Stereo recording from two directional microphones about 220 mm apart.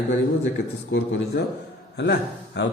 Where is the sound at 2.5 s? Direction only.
55° left (ahead or behind).